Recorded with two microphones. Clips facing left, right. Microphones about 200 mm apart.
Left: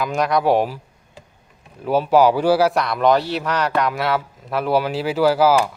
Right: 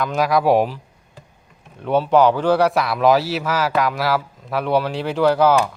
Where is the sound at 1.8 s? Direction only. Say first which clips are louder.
Even; 5° left (ahead or behind).